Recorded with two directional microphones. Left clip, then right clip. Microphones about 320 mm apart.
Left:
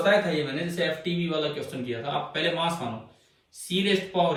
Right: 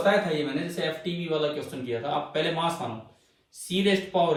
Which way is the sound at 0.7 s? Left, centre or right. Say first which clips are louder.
Left 2 dB; centre.